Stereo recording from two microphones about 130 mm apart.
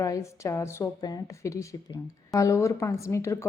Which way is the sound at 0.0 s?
25° left (ahead or behind).